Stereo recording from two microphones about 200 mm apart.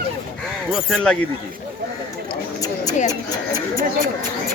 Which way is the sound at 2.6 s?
20° left (ahead or behind).